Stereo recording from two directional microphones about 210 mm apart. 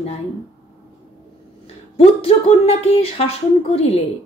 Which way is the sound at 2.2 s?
30° left (ahead or behind).